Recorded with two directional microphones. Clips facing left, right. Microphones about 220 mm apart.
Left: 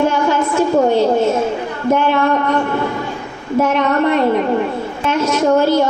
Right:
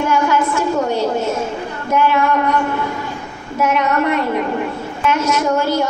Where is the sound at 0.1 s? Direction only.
30° left (ahead or behind).